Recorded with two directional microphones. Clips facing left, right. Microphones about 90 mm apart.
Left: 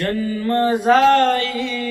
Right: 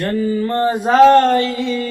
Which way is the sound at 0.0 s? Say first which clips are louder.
Right 3 dB; 30° right (ahead or behind).